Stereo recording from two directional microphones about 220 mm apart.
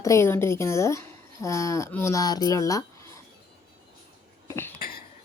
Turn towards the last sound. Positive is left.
turn(degrees=45)  # may be behind; listen again after turning